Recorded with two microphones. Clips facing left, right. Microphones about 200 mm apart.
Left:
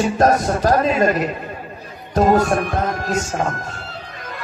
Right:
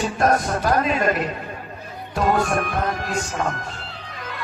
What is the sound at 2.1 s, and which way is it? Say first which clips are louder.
A man's voice: left 5 dB; 40° left (ahead or behind).